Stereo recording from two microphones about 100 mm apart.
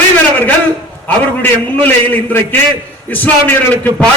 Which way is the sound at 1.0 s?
20° left (ahead or behind).